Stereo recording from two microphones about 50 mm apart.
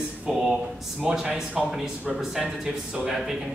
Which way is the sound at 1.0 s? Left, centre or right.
Centre.